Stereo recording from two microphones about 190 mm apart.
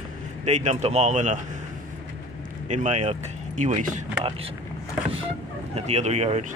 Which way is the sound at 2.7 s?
40° right (ahead or behind).